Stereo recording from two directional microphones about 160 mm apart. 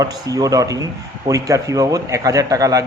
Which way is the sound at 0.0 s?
20° right (ahead or behind).